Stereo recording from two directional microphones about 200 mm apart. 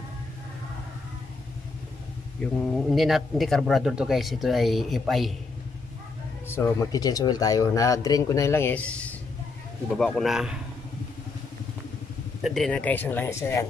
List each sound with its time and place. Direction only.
2.7 s speech: centre (ahead or behind)
6.5 s speech: 15° left (ahead or behind); by 10.6 s 5° right (ahead or behind)
12.4 s speech: centre (ahead or behind)